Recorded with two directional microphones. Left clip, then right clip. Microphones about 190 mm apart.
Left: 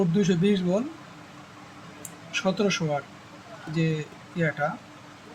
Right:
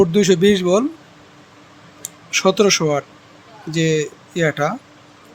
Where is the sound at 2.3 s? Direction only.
60° right (ahead or behind).